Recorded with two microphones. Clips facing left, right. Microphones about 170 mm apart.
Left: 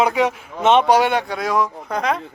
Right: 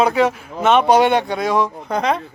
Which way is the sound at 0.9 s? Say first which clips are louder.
Right 2 dB; 5° left (ahead or behind).